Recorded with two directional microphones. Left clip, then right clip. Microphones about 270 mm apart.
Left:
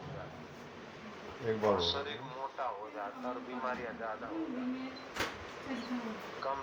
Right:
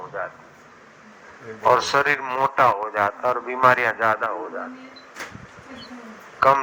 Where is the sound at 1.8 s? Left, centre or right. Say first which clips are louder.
Right 16 dB; right.